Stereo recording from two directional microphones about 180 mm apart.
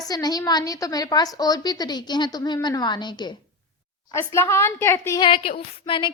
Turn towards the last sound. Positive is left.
turn(degrees=30)  # may be behind; listen again after turning